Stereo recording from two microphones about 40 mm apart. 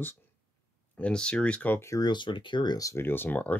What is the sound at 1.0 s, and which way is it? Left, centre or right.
Speech, left.